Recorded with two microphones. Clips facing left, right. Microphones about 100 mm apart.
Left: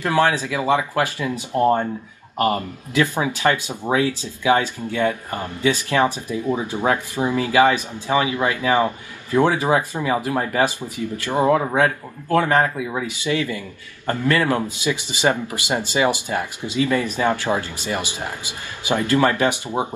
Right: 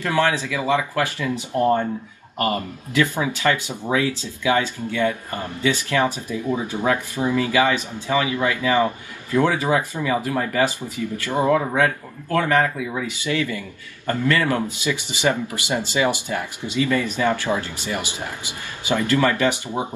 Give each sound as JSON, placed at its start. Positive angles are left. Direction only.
{"t": 0.0, "sound": "speech", "side_deg": 20}
{"t": 10.6, "sound": "speech", "side_deg": 20}